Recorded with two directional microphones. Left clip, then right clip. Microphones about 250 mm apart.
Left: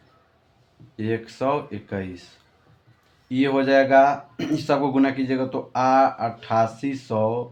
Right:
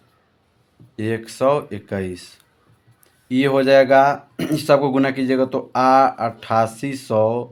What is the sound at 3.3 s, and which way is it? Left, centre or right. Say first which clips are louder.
Speech: right 5 dB; right.